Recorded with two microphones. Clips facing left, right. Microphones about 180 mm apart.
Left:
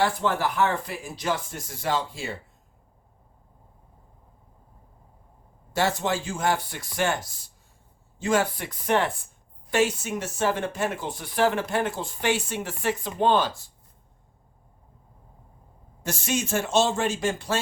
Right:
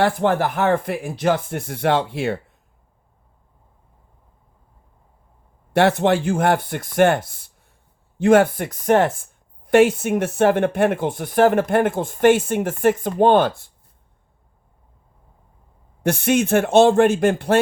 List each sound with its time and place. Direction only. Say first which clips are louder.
0.0 s speech: right 6 dB; 55° right (ahead or behind)
5.7 s speech: right 9 dB; 65° right (ahead or behind)
16.0 s speech: right 10 dB; 60° right (ahead or behind)